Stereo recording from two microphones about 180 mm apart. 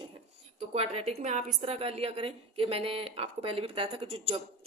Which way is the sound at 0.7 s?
35° right (ahead or behind).